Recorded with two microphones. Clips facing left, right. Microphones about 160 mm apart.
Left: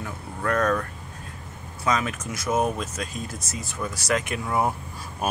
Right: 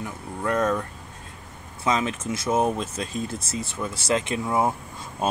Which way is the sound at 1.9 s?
25° right (ahead or behind).